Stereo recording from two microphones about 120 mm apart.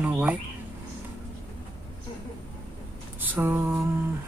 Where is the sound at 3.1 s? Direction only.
15° right (ahead or behind).